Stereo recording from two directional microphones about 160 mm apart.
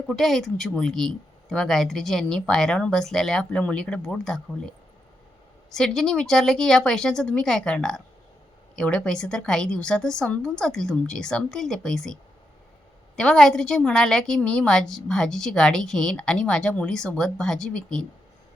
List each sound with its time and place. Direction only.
0.1 s a woman's voice: centre (ahead or behind)
5.7 s a woman's voice: 5° left (ahead or behind)
13.1 s a woman's voice: 5° left (ahead or behind)